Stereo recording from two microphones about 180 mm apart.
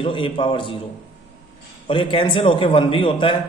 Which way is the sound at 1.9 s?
30° left (ahead or behind).